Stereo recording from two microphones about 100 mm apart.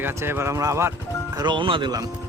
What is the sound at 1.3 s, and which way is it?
Speech, 45° right (ahead or behind).